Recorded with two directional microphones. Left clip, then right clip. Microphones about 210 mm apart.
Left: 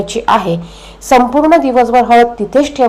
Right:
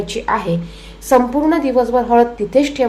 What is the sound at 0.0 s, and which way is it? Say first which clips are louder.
A woman's voice: left 7 dB; 15° left (ahead or behind).